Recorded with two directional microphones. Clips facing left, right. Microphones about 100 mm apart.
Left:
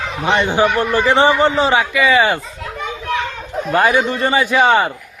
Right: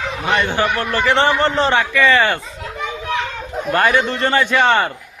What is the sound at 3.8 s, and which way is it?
A man's voice, 10° left (ahead or behind).